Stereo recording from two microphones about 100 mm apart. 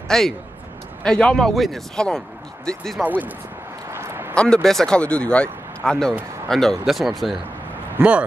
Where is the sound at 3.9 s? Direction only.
25° right (ahead or behind).